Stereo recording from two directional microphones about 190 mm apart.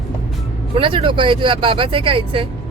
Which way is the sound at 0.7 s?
30° right (ahead or behind).